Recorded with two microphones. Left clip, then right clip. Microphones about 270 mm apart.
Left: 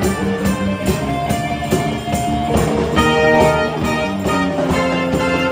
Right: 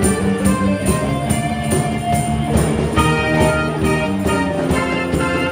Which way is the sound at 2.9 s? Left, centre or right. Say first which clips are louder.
Left 5 dB; left.